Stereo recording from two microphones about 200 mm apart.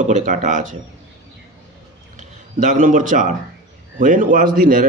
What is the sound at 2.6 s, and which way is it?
A man's voice, 40° right (ahead or behind).